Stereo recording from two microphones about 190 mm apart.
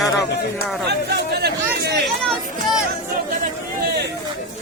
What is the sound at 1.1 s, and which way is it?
Chatter, 60° right (ahead or behind).